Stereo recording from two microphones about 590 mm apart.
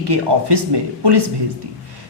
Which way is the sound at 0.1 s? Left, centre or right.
Right.